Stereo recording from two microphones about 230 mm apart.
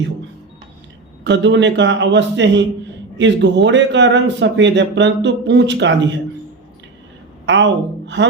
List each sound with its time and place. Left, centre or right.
1.2 s speech: right
7.4 s a woman's voice: right